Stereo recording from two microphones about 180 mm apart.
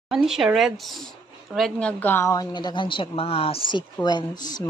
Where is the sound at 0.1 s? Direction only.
Centre (ahead or behind).